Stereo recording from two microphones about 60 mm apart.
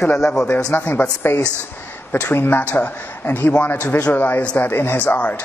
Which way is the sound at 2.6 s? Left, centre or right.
Left.